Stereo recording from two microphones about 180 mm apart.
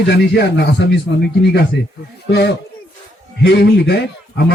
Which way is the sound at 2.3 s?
70° left (ahead or behind).